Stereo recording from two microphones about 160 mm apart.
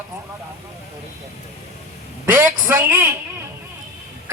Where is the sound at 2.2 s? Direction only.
15° right (ahead or behind).